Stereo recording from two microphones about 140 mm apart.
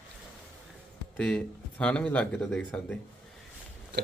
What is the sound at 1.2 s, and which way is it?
Speech, 5° left (ahead or behind).